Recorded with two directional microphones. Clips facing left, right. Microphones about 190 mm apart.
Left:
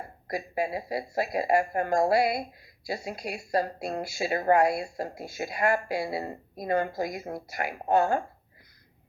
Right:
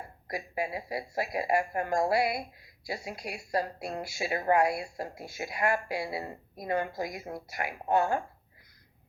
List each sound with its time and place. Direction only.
0.3 s speech: 30° left (ahead or behind)